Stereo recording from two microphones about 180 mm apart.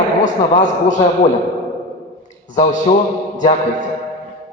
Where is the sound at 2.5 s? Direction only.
40° left (ahead or behind).